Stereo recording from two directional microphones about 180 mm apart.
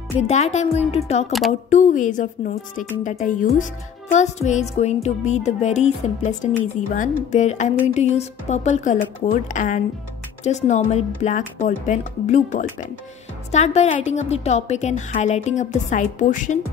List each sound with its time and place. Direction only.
0.2 s a woman's voice: 40° left (ahead or behind)